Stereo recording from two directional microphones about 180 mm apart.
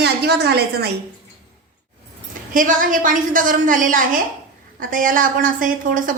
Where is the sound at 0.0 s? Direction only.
65° right (ahead or behind).